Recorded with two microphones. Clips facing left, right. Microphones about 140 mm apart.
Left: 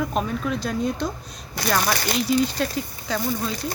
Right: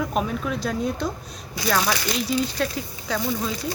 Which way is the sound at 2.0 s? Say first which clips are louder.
Left 3 dB; 50° left (ahead or behind).